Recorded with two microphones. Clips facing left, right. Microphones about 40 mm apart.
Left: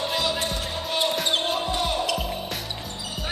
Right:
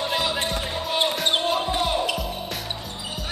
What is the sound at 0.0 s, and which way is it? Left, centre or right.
Music, centre.